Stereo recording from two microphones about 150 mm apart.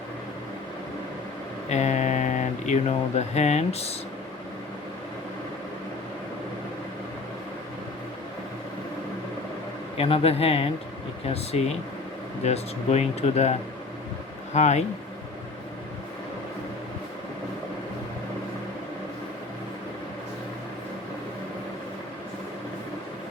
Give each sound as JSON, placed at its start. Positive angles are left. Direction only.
{"t": 1.7, "sound": "speech", "side_deg": 50}
{"t": 10.0, "sound": "speech", "side_deg": 40}